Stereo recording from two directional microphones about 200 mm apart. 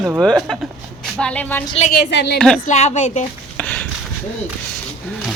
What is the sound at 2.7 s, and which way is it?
Speech, 35° left (ahead or behind).